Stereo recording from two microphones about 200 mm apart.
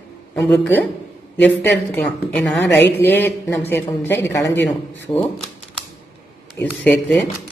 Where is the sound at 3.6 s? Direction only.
10° left (ahead or behind).